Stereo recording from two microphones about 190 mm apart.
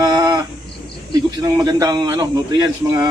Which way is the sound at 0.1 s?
20° right (ahead or behind).